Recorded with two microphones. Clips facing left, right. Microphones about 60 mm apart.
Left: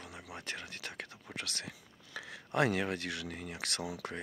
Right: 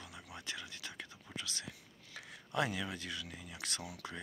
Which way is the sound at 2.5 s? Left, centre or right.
Left.